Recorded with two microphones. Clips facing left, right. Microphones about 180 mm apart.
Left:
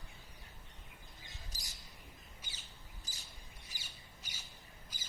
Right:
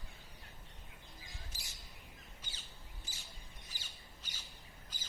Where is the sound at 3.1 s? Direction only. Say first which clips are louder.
Right 1 dB; 40° left (ahead or behind).